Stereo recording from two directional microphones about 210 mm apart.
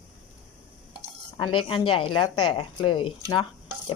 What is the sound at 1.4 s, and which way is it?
A woman's voice, 25° left (ahead or behind).